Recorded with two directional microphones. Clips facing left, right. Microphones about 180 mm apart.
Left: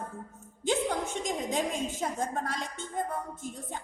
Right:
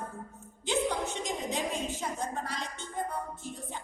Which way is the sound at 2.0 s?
50° left (ahead or behind).